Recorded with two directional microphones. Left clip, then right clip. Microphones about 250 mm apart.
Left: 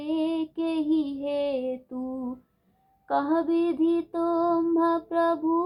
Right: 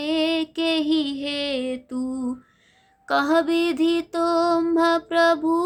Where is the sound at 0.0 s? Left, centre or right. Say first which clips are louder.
Right 5 dB; right.